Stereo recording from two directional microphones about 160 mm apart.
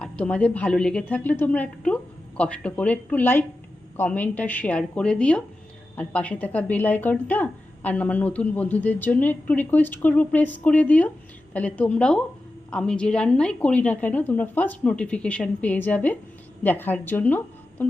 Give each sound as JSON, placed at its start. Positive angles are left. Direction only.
{"t": 0.0, "sound": "a woman's voice", "side_deg": 5}